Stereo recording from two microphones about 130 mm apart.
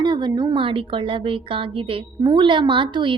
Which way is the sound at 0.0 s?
35° right (ahead or behind).